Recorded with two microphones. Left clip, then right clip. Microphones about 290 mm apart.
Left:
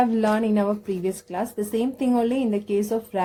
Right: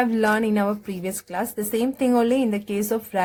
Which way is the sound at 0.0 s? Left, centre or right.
Right.